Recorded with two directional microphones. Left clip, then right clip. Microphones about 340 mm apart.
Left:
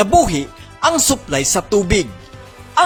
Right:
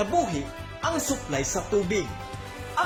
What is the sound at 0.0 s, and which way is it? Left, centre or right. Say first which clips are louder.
A man's voice: left 12 dB; left.